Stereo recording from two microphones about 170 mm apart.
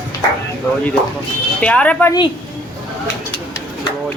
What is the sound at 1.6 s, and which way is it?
Speech, 5° left (ahead or behind).